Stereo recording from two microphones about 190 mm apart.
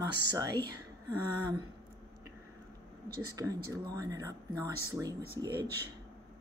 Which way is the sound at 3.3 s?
15° right (ahead or behind).